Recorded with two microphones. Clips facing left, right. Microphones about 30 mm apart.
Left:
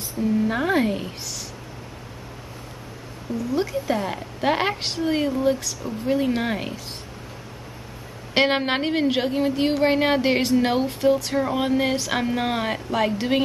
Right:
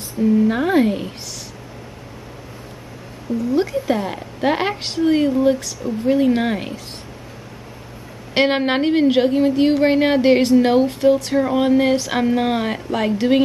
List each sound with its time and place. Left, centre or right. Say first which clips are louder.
0.2 s speech: right 6 dB; centre
3.5 s a woman's voice: right 4 dB; centre
8.4 s a woman's voice: right 3 dB; centre